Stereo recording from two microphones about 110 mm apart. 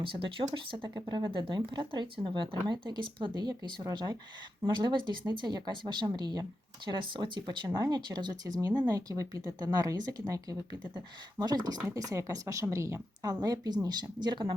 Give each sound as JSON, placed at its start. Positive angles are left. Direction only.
{"t": 0.0, "sound": "a woman's voice", "side_deg": -50}